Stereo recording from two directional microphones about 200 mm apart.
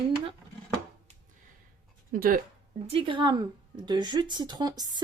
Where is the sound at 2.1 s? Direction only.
45° right (ahead or behind).